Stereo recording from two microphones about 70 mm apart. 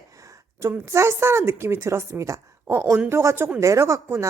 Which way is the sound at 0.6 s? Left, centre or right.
Right.